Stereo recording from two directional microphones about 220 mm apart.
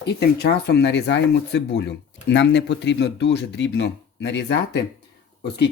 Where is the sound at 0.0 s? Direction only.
50° left (ahead or behind).